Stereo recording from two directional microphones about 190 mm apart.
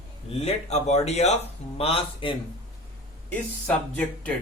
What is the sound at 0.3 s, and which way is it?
Speech, 30° left (ahead or behind).